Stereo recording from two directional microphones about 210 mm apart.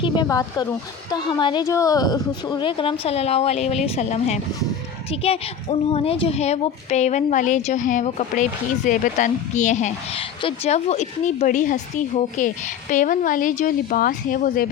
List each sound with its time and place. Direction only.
0.0 s a woman's voice: 20° left (ahead or behind); by 14.7 s 40° left (ahead or behind)